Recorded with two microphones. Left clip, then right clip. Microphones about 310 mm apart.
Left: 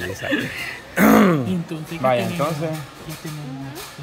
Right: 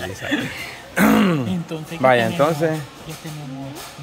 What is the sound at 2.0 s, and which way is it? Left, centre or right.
Speech, centre.